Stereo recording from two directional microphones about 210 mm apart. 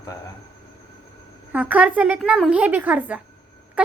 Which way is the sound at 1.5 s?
5° right (ahead or behind).